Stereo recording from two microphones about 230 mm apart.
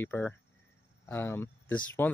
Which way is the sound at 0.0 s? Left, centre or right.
Centre.